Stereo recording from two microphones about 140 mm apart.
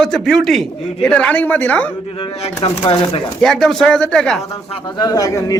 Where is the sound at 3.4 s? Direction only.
5° left (ahead or behind).